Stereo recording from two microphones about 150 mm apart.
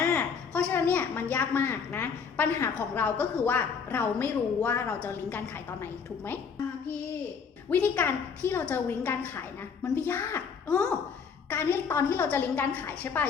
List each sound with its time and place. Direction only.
0.0 s a sound: 20° left (ahead or behind)
0.6 s a woman's voice: 10° left (ahead or behind)
7.7 s a woman's voice: 10° left (ahead or behind)